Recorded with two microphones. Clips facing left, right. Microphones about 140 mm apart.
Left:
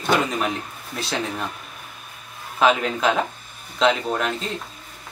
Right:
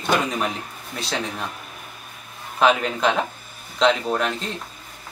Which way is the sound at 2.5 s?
Centre (ahead or behind).